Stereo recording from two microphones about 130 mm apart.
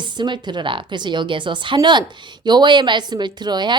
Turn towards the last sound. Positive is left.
turn(degrees=-35)  # may be behind; listen again after turning